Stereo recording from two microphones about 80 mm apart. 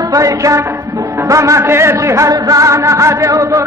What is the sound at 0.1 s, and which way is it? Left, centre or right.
Music, right.